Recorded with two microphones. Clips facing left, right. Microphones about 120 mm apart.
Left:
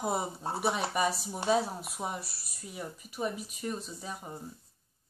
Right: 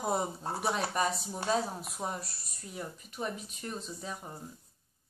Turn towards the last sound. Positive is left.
turn(degrees=5)  # may be behind; listen again after turning